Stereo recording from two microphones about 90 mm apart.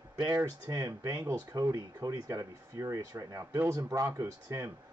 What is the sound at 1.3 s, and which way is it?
Speech, 35° right (ahead or behind).